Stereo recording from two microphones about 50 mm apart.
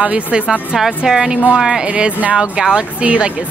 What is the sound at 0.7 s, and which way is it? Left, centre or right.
Speech, centre.